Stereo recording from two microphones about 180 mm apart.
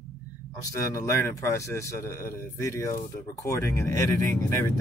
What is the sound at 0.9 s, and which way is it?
Speech, 15° left (ahead or behind).